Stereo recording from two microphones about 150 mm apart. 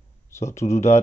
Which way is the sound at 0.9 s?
50° left (ahead or behind).